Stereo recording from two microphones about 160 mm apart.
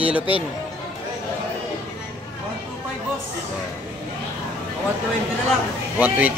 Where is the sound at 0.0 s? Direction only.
10° right (ahead or behind).